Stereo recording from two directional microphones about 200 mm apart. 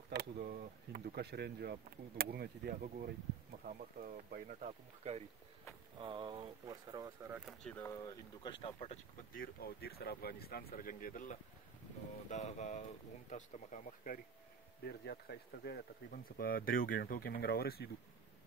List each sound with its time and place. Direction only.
0.1 s speech: 50° right (ahead or behind); by 7.3 s 20° right (ahead or behind)
7.3 s speech: centre (ahead or behind)
7.8 s speech: 15° left (ahead or behind); by 14.2 s 40° left (ahead or behind)
14.9 s speech: 55° left (ahead or behind)